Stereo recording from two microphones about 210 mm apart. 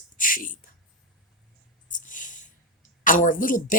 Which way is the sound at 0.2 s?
40° left (ahead or behind).